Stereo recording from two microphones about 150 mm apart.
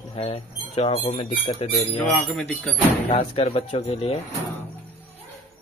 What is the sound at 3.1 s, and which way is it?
Speech, 40° left (ahead or behind).